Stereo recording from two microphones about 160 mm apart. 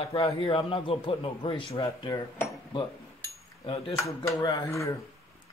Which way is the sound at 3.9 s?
20° left (ahead or behind).